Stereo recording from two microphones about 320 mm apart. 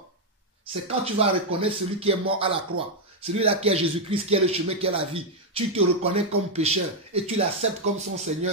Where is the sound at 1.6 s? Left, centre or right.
Centre.